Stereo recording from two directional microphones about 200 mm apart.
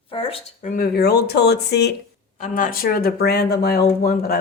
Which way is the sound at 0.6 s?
45° left (ahead or behind).